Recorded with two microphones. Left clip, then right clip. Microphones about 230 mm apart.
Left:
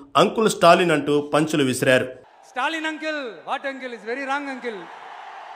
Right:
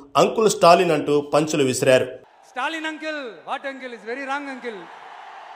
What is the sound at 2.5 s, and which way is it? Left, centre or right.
A man's voice, centre.